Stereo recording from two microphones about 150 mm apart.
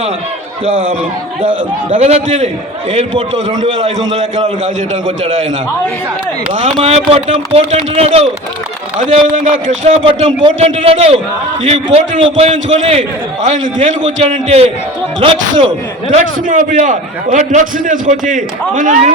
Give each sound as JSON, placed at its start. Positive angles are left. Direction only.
{"t": 1.9, "sound": "a man's voice", "side_deg": -45}
{"t": 4.6, "sound": "a man's voice", "side_deg": -55}
{"t": 6.6, "sound": "speech", "side_deg": -45}
{"t": 9.8, "sound": "a man's voice", "side_deg": -40}
{"t": 16.0, "sound": "a man's voice", "side_deg": -60}